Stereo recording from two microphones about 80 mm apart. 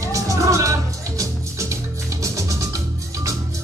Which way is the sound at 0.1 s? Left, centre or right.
Right.